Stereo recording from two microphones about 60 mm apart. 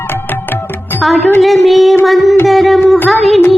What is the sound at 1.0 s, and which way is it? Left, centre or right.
Speech, centre.